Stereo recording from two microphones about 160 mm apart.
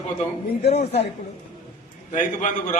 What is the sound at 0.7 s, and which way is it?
Speech, 40° left (ahead or behind).